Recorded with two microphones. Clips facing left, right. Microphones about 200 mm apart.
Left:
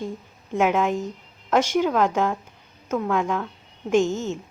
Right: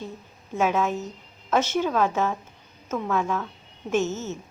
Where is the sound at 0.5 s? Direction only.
15° left (ahead or behind).